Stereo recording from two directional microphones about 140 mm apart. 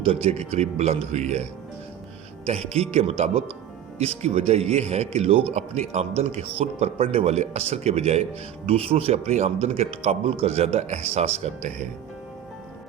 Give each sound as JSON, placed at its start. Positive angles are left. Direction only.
{"t": 0.0, "sound": "speech", "side_deg": -45}
{"t": 2.5, "sound": "speech", "side_deg": -50}